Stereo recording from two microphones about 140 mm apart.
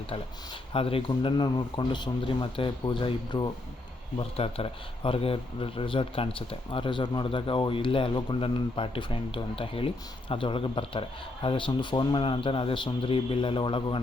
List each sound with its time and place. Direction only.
0.7 s speech: 40° left (ahead or behind)